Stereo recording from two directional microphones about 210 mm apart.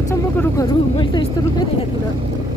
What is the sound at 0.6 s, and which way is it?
Speech, 20° left (ahead or behind).